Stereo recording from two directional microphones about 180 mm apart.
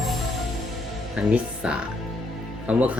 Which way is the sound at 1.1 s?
5° right (ahead or behind).